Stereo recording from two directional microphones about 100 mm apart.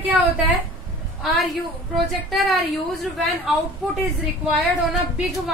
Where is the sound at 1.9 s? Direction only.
Centre (ahead or behind).